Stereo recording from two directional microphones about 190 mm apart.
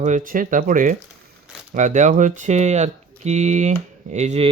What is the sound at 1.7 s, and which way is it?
Speech, 40° right (ahead or behind).